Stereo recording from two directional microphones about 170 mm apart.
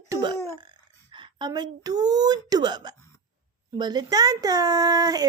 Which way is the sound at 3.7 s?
25° right (ahead or behind).